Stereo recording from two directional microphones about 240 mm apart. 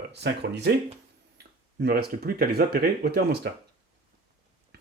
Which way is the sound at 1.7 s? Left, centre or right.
Right.